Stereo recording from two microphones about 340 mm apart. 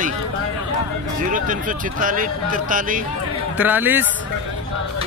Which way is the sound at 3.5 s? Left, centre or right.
Centre.